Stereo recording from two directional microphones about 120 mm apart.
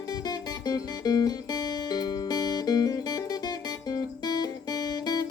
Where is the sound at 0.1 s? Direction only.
35° left (ahead or behind).